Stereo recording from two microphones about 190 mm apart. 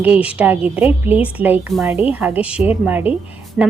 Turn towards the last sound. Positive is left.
turn(degrees=-5)  # may be behind; listen again after turning